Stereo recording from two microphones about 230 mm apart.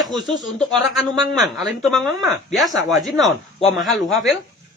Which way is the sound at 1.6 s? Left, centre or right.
Centre.